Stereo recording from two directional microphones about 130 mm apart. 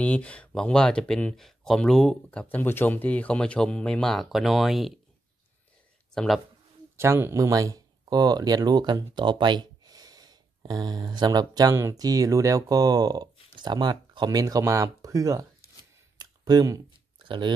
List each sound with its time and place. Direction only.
0.0 s speech: 10° left (ahead or behind)
2.4 s speech: 15° left (ahead or behind); by 4.9 s centre (ahead or behind)
6.1 s speech: centre (ahead or behind)
7.0 s speech: 20° right (ahead or behind)
16.2 s a sound: 30° right (ahead or behind)
17.3 s speech: 40° right (ahead or behind)